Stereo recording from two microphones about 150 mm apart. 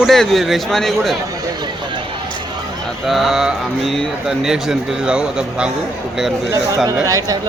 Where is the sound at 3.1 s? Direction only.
Centre (ahead or behind).